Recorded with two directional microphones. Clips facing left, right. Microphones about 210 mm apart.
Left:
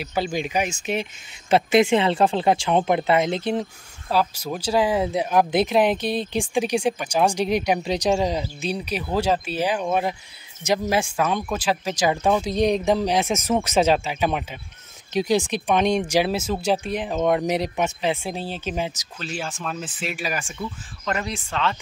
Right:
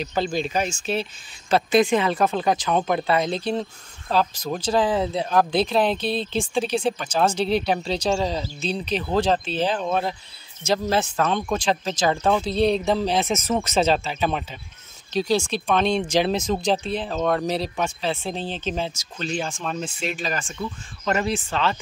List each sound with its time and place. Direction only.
0.0 s speech: 10° left (ahead or behind)
4.1 s speech: 10° left (ahead or behind)
19.1 s speech: 5° left (ahead or behind)
21.5 s speech: centre (ahead or behind)